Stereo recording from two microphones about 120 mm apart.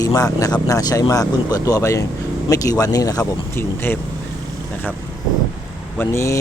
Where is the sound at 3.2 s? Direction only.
15° left (ahead or behind).